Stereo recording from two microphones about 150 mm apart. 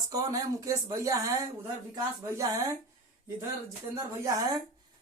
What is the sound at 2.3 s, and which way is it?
Speech, 20° right (ahead or behind).